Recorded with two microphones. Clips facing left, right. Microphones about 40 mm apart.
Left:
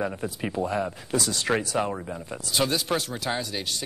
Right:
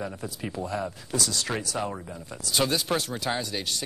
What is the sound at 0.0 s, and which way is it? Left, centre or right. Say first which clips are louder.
Speech: left 5 dB; left.